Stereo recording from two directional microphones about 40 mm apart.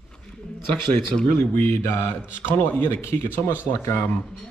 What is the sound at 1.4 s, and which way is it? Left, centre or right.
A man's voice, left.